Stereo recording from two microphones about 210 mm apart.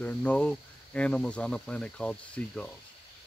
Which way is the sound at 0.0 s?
5° left (ahead or behind).